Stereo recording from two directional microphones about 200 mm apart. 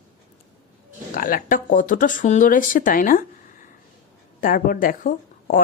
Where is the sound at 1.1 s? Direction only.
45° left (ahead or behind).